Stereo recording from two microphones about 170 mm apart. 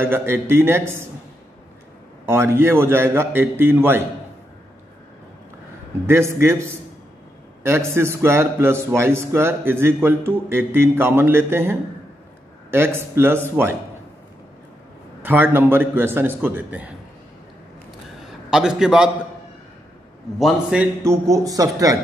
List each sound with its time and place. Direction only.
0.0 s a man's voice: 15° right (ahead or behind)
2.2 s a man's voice: 15° right (ahead or behind)
6.0 s a man's voice: 15° right (ahead or behind)
15.2 s a man's voice: 10° right (ahead or behind)
18.2 s a man's voice: 5° right (ahead or behind)
20.3 s a man's voice: 5° right (ahead or behind)
21.0 s a man's voice: 20° right (ahead or behind)